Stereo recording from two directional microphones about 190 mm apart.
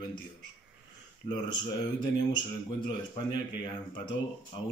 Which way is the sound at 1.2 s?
25° left (ahead or behind).